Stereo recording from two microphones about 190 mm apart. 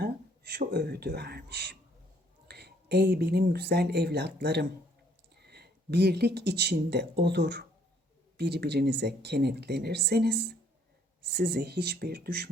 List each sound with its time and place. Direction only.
0.0 s speech: 55° right (ahead or behind)